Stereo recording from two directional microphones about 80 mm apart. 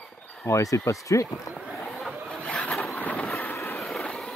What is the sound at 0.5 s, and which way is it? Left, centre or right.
Speech, left.